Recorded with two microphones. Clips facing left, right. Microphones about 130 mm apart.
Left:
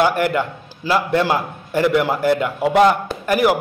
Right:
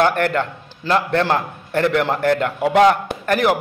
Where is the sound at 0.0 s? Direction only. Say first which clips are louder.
Even; 10° left (ahead or behind).